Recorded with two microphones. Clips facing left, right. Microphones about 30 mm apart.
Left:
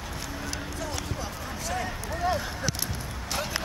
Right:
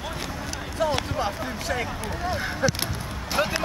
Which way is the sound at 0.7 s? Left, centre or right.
Right.